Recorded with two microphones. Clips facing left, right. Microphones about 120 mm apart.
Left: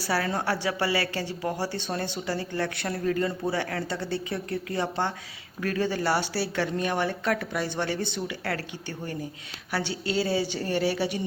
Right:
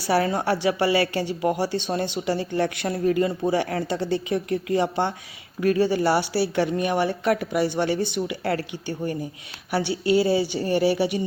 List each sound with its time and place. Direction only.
0.1 s speech: 20° right (ahead or behind)